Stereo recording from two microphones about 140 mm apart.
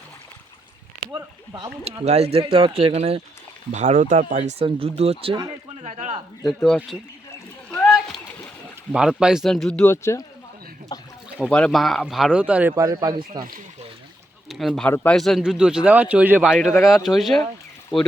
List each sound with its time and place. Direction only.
1.1 s speech: 35° right (ahead or behind)
2.0 s speech: 50° right (ahead or behind)
3.7 s speech: 55° right (ahead or behind)
4.6 s speech: 45° right (ahead or behind)
5.8 s speech: 55° right (ahead or behind)
6.4 s a man's voice: centre (ahead or behind)
7.7 s rowboat: centre (ahead or behind)
8.9 s a man's voice: 5° right (ahead or behind)
9.8 s speech: 20° left (ahead or behind)
10.9 s a sound: 30° left (ahead or behind)
11.4 s a man's voice: 10° left (ahead or behind); by 12.7 s 10° right (ahead or behind)
12.7 s speech: 25° right (ahead or behind)
14.5 s a man's voice: centre (ahead or behind)
14.8 s a man's voice: 10° left (ahead or behind)